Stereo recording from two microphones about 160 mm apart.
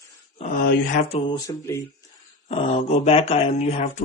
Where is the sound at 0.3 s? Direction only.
50° left (ahead or behind).